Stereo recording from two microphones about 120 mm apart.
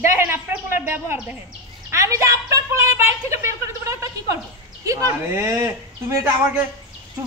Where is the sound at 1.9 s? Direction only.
25° right (ahead or behind).